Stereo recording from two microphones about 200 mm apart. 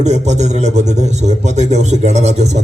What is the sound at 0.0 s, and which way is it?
A man's voice, 35° right (ahead or behind).